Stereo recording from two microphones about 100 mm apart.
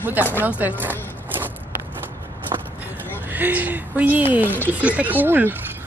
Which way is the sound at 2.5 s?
50° right (ahead or behind).